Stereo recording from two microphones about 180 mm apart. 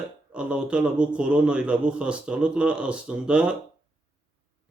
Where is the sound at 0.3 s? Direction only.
5° right (ahead or behind).